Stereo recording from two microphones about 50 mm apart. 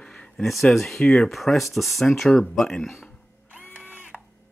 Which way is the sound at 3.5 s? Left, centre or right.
Right.